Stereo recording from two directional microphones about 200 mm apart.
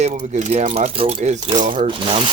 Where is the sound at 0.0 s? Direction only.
40° right (ahead or behind).